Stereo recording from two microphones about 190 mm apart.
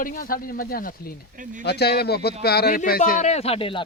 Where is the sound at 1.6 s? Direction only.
60° left (ahead or behind).